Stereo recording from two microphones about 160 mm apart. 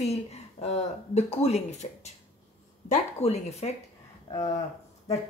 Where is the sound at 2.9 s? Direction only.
45° left (ahead or behind).